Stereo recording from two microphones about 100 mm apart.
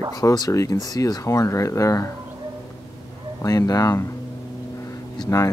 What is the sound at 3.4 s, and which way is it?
Speech, 35° left (ahead or behind).